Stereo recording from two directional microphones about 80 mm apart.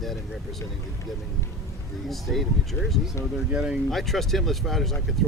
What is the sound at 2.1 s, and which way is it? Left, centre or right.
Speech, centre.